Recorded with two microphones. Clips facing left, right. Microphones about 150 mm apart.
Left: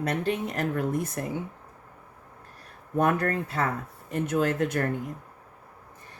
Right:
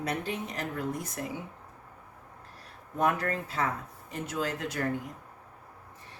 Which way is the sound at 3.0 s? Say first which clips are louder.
Left 4 dB; 55° left (ahead or behind).